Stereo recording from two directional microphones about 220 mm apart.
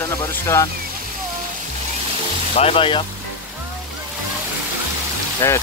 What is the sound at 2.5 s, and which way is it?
Speech, 25° left (ahead or behind).